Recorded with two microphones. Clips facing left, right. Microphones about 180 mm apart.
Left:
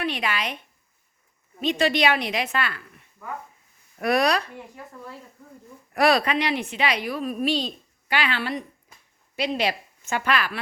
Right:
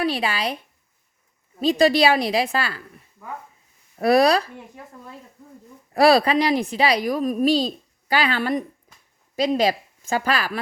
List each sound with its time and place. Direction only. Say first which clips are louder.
0.0 s speech: right 4 dB; 30° right (ahead or behind)
3.9 s speech: right 5 dB; 35° right (ahead or behind)
5.9 s a woman's voice: right 5 dB; 35° right (ahead or behind)